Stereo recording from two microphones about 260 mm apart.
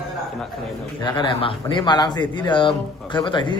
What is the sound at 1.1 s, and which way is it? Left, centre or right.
Speech, centre.